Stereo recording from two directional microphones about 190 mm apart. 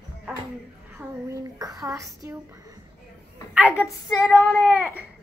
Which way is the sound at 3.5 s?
10° right (ahead or behind).